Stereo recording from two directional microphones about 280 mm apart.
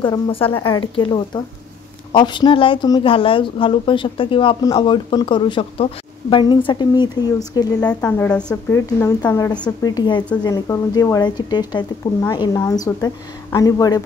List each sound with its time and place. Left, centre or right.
0.0 s speech: centre